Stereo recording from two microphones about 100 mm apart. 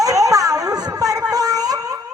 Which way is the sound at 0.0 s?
35° right (ahead or behind).